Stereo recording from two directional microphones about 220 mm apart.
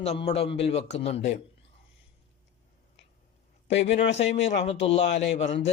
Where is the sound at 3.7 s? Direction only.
55° left (ahead or behind).